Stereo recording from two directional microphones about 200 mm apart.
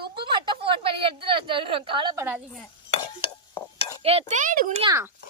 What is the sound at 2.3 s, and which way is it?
Speech, 5° right (ahead or behind).